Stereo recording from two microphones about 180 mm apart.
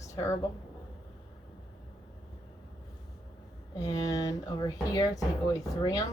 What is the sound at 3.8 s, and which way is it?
Speech, 20° left (ahead or behind).